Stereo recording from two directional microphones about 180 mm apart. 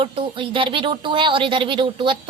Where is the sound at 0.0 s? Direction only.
30° right (ahead or behind).